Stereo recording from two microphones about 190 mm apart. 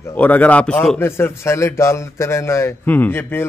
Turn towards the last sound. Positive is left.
turn(degrees=10)  # may be behind; listen again after turning